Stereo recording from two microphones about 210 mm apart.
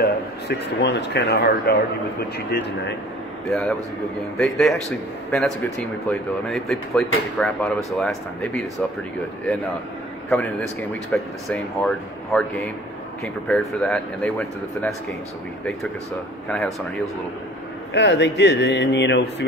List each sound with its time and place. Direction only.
0.0 s speech: 55° left (ahead or behind)
4.4 s speech: centre (ahead or behind)
10.3 s speech: 5° left (ahead or behind)
16.4 s speech: 5° left (ahead or behind)
17.9 s speech: 55° left (ahead or behind)